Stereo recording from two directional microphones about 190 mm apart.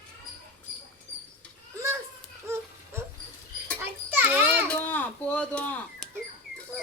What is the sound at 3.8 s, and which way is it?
Children playing, 10° right (ahead or behind).